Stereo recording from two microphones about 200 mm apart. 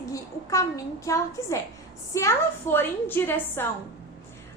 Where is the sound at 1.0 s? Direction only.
15° left (ahead or behind).